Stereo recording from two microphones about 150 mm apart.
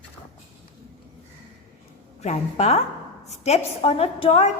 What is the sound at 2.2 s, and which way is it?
A woman's voice, 45° left (ahead or behind).